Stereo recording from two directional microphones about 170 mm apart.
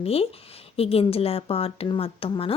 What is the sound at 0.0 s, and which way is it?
A woman's voice, 35° left (ahead or behind).